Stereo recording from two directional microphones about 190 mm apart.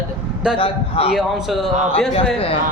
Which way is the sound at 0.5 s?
30° left (ahead or behind).